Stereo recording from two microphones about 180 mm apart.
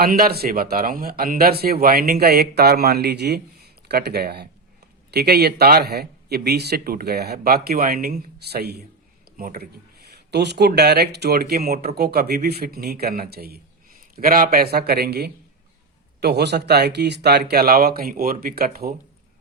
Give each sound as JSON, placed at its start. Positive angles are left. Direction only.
{"t": 0.0, "sound": "speech", "side_deg": -55}
{"t": 9.4, "sound": "speech", "side_deg": -50}
{"t": 10.1, "sound": "a sound", "side_deg": -70}
{"t": 10.7, "sound": "speech", "side_deg": -65}